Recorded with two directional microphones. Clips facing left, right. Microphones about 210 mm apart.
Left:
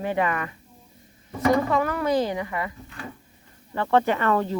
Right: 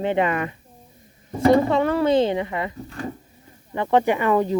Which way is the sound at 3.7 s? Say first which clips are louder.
Right 2 dB; 15° right (ahead or behind).